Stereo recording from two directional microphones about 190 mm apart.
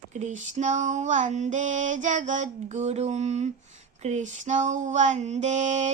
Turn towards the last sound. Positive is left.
turn(degrees=-40)  # may be behind; listen again after turning